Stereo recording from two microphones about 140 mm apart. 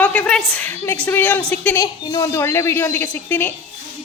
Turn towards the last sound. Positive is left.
turn(degrees=15)  # may be behind; listen again after turning